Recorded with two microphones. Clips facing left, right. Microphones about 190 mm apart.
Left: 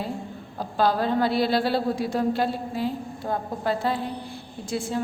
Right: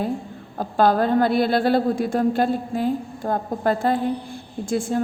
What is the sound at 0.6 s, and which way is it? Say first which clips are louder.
A woman's voice: right 5 dB; 50° right (ahead or behind).